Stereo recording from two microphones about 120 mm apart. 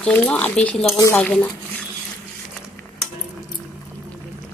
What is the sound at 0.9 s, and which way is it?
Speech, 25° left (ahead or behind).